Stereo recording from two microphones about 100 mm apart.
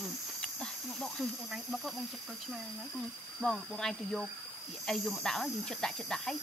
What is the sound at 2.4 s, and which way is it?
Speech, centre (ahead or behind).